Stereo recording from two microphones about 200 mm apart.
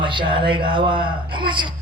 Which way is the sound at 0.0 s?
25° right (ahead or behind).